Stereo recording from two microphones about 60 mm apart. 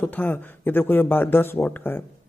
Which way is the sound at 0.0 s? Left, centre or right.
Left.